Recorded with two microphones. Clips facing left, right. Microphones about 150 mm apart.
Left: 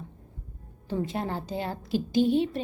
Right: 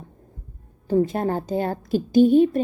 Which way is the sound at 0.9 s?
45° right (ahead or behind).